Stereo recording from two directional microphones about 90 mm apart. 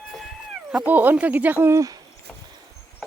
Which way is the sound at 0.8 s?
20° right (ahead or behind).